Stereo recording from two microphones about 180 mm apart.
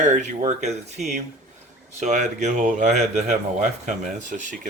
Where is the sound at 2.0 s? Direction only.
40° right (ahead or behind).